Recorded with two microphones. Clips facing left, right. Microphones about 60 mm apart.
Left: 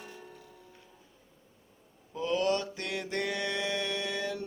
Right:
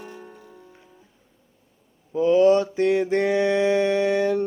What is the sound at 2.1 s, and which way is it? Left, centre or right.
Mantra, right.